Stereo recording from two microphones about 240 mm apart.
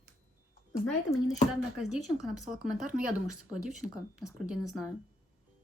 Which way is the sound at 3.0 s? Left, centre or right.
Left.